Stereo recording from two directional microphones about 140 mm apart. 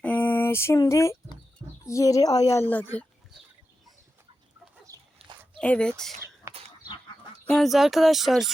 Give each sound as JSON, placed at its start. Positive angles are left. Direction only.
{"t": 0.0, "sound": "a sound", "side_deg": 10}
{"t": 1.8, "sound": "a child's voice", "side_deg": 25}
{"t": 4.9, "sound": "chicken", "side_deg": -25}
{"t": 5.5, "sound": "speech", "side_deg": 5}
{"t": 6.5, "sound": "livestock", "side_deg": -20}
{"t": 7.5, "sound": "speech", "side_deg": 0}